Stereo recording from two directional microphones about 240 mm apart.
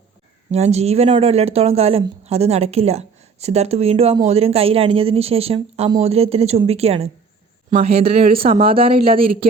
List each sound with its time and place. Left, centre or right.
0.5 s speech: right